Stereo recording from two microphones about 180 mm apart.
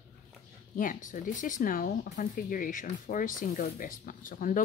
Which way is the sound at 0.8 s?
45° left (ahead or behind).